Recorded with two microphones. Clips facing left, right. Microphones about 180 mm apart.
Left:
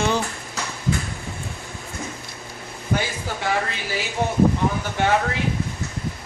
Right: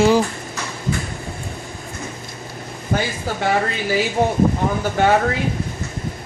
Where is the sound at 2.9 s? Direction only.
50° right (ahead or behind).